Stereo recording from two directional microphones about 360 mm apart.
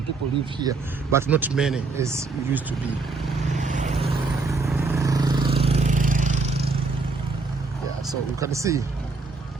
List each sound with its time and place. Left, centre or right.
0.6 s speech: centre
3.6 s vehicle: centre
8.4 s speech: centre